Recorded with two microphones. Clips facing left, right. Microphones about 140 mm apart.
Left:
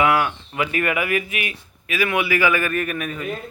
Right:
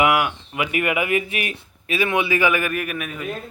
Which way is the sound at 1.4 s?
40° right (ahead or behind).